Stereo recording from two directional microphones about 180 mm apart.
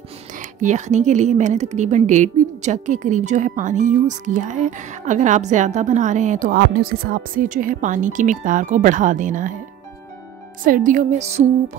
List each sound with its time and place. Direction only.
0.4 s a woman's voice: 45° right (ahead or behind)
10.6 s a woman's voice: 50° right (ahead or behind)